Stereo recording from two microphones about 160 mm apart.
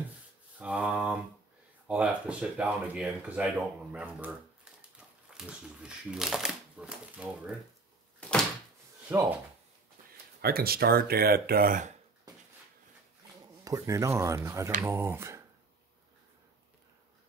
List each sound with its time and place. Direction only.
0.6 s a sound: 5° right (ahead or behind)
1.9 s speech: 10° right (ahead or behind)
5.4 s speech: 5° right (ahead or behind)
8.2 s door: 5° left (ahead or behind)
9.1 s speech: 15° right (ahead or behind)
10.4 s speech: 70° right (ahead or behind)
13.7 s speech: 20° right (ahead or behind)